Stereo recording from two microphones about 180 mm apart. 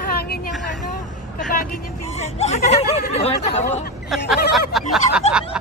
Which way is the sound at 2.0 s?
35° left (ahead or behind).